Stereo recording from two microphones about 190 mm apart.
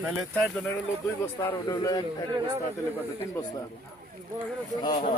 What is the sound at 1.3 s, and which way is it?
Speech, 15° left (ahead or behind).